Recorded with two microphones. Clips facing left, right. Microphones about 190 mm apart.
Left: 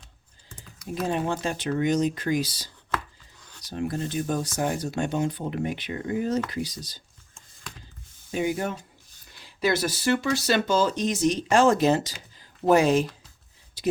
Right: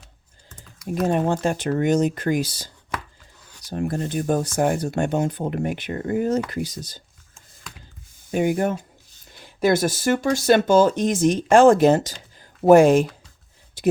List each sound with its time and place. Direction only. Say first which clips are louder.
1.0 s speech: right 6 dB; 45° right (ahead or behind)
3.7 s speech: right 4 dB; 50° right (ahead or behind)
8.3 s speech: right 6 dB; 50° right (ahead or behind)
12.4 s a sound: right 7 dB; 50° right (ahead or behind)